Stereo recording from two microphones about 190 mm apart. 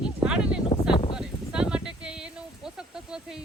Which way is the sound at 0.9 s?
25° left (ahead or behind).